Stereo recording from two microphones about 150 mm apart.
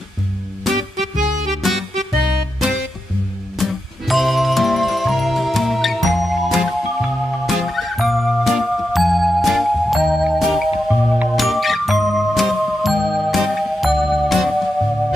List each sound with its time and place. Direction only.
1.6 s music: centre (ahead or behind)
3.5 s music: centre (ahead or behind)